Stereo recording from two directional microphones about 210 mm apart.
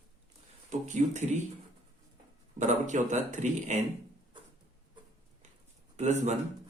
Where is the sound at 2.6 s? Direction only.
35° right (ahead or behind).